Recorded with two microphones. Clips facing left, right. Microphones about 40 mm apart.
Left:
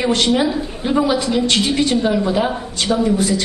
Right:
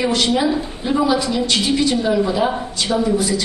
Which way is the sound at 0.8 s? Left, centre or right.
Centre.